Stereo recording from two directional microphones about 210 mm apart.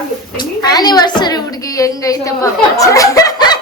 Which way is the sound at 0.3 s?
20° left (ahead or behind).